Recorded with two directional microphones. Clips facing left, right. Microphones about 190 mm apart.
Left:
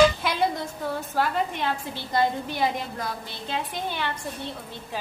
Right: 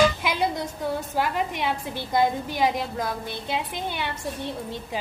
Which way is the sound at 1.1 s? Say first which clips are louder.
Even; 15° right (ahead or behind).